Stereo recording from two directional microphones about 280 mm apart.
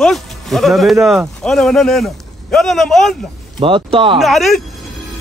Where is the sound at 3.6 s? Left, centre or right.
Centre.